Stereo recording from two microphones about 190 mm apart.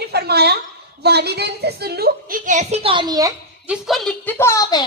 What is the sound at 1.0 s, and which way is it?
A woman's voice, 60° right (ahead or behind).